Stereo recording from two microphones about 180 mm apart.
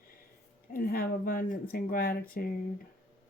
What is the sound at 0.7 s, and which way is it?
Speech, 55° left (ahead or behind).